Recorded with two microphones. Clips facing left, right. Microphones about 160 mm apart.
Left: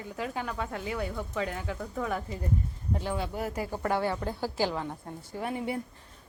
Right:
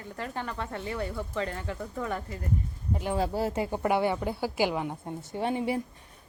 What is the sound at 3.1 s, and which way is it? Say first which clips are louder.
Speech: right 8 dB; 35° right (ahead or behind).